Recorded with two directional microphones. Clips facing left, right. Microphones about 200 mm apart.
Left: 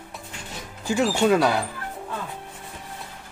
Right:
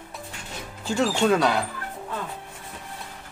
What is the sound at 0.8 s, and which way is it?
Speech, 10° left (ahead or behind).